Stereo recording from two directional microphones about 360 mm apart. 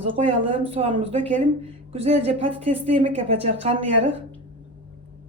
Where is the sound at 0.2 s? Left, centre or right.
Centre.